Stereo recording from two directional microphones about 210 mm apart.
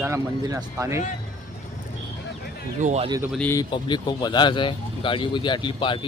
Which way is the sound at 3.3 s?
5° left (ahead or behind).